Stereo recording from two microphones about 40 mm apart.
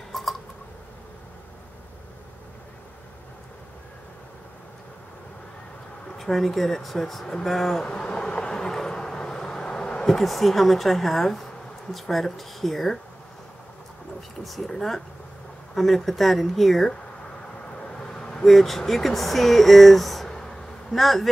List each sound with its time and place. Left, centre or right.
0.1 s a sound: centre
6.1 s speech: centre
7.8 s bee: left
10.0 s speech: centre
14.4 s speech: centre
17.7 s vehicle: left
18.5 s speech: centre
20.2 s insect: centre
20.9 s speech: centre